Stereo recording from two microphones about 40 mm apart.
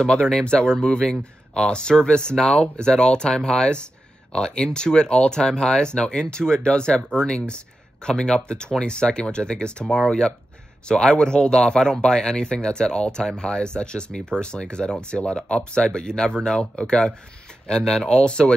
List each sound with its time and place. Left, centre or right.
0.0 s speech: centre